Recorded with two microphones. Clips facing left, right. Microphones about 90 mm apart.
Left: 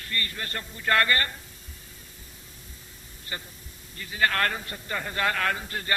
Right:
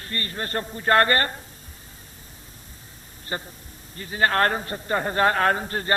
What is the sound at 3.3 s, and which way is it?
A man's voice, 40° right (ahead or behind).